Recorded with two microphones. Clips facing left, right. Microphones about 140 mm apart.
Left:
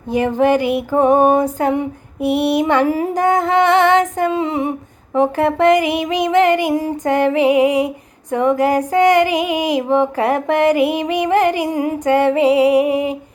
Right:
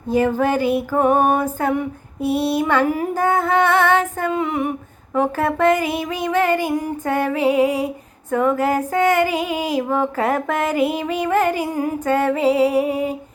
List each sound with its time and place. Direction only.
0.1 s music: 15° left (ahead or behind)